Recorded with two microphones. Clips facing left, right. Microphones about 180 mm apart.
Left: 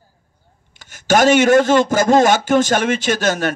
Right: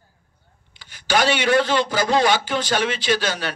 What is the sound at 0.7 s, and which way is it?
A man's voice, 45° left (ahead or behind).